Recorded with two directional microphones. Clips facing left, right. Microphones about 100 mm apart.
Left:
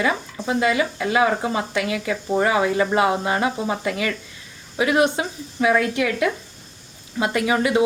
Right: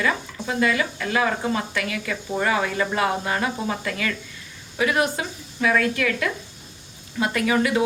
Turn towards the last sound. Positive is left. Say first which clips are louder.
# left 2 dB
turn(degrees=20)  # may be behind; listen again after turning